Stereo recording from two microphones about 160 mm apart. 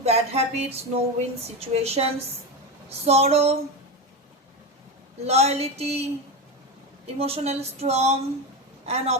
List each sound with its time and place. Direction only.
0.0 s speech: 40° right (ahead or behind)
5.2 s speech: 40° right (ahead or behind)
7.2 s speech: 40° right (ahead or behind)